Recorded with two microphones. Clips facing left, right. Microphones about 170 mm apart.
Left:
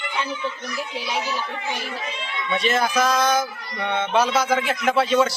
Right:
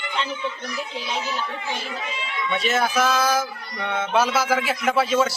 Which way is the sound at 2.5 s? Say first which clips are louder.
Left 1 dB; centre (ahead or behind).